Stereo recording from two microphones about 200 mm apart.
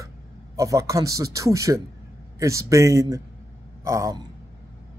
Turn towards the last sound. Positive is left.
turn(degrees=-15)  # may be behind; listen again after turning